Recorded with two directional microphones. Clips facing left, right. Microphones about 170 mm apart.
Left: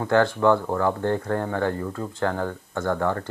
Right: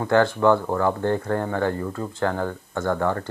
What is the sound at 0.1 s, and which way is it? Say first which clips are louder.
Speech: right 1 dB; 20° right (ahead or behind).